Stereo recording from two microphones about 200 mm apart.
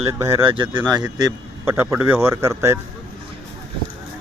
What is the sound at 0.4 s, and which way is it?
A man's voice, 25° right (ahead or behind).